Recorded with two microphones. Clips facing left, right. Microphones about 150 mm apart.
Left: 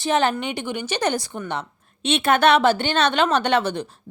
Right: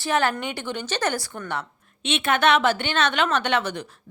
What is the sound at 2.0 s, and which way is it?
Speech, 35° left (ahead or behind).